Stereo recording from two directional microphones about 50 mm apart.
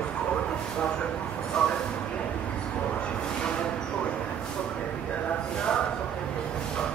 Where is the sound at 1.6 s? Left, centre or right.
Centre.